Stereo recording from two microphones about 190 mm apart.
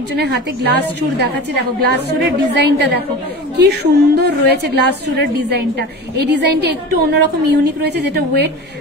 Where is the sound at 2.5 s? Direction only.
65° right (ahead or behind).